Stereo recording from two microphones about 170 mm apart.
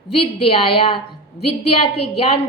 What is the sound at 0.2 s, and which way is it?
A woman's voice, 35° left (ahead or behind).